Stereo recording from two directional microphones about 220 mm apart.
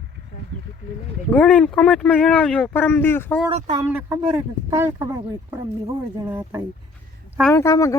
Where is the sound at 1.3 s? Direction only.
5° left (ahead or behind).